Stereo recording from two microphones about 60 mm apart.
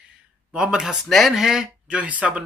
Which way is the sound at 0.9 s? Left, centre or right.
Centre.